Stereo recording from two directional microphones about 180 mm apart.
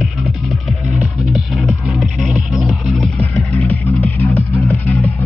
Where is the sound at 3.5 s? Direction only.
15° left (ahead or behind).